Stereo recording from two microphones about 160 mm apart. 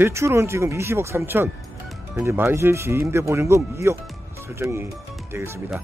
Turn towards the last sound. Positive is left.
turn(degrees=-15)  # may be behind; listen again after turning